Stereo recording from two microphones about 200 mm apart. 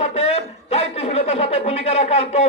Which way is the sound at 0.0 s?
30° left (ahead or behind).